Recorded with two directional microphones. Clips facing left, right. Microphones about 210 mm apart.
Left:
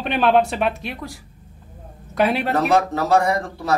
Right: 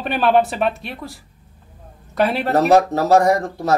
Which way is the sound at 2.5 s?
40° right (ahead or behind).